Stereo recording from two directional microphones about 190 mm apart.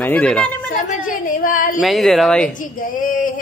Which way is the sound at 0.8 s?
45° left (ahead or behind).